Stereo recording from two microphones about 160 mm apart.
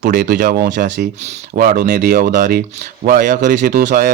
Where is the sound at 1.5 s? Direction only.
65° right (ahead or behind).